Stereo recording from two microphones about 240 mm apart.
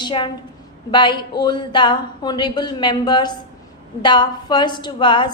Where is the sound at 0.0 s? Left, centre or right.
Centre.